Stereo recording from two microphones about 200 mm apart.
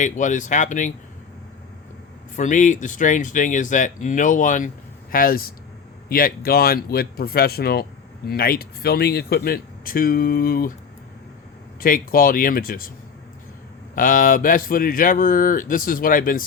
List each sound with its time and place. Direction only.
0.0 s speech: 40° left (ahead or behind)
2.3 s speech: 40° left (ahead or behind)
11.8 s speech: 45° left (ahead or behind)
13.9 s speech: 45° left (ahead or behind)